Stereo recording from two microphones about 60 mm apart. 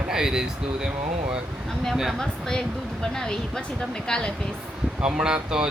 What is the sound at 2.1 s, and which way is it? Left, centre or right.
Speech, centre.